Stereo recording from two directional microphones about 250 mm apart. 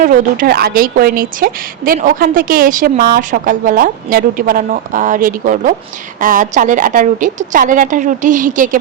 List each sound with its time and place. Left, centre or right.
0.0 s a woman's voice: right